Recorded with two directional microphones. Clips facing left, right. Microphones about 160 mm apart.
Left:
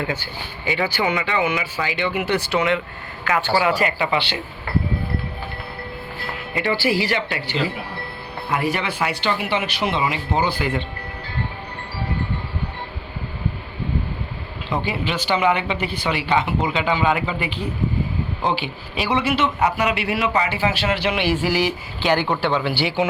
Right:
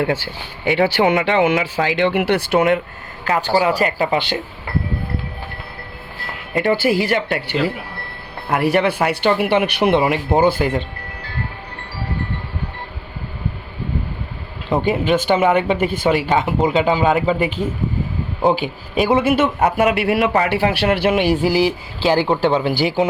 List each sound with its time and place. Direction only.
0.6 s speech: 60° right (ahead or behind)
3.2 s speech: 35° right (ahead or behind)
6.5 s a man's voice: 45° right (ahead or behind)
8.4 s speech: 60° right (ahead or behind); by 10.8 s 40° right (ahead or behind)
14.7 s a man's voice: 45° right (ahead or behind)